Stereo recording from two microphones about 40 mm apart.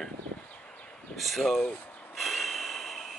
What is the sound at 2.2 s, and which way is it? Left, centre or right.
Snort, centre.